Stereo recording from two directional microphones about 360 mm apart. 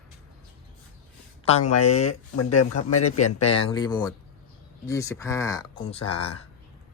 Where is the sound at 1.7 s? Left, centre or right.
Left.